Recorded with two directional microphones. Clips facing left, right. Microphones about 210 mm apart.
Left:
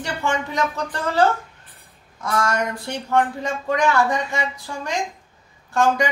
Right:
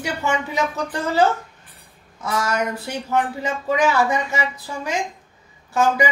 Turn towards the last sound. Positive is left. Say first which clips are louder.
# even
turn(degrees=-5)  # may be behind; listen again after turning